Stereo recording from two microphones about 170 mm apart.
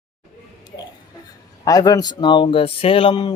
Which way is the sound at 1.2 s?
20° left (ahead or behind).